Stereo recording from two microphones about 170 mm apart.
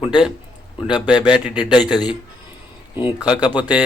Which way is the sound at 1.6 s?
25° left (ahead or behind).